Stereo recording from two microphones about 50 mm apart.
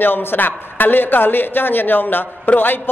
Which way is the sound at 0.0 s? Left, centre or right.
Left.